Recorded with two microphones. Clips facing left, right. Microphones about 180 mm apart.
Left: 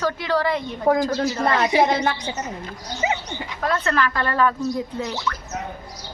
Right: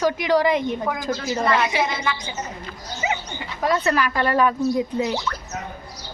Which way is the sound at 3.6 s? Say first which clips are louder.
Right 2 dB; 10° right (ahead or behind).